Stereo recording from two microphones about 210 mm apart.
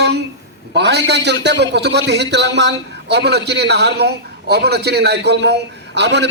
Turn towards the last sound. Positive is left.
turn(degrees=-55)  # may be behind; listen again after turning